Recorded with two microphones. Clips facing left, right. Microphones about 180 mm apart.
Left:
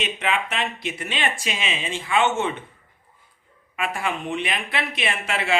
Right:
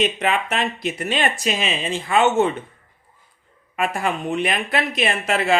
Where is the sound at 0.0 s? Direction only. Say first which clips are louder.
Right 5 dB; 40° right (ahead or behind).